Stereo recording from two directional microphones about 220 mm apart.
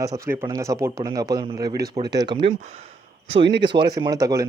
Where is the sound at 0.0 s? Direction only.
15° right (ahead or behind).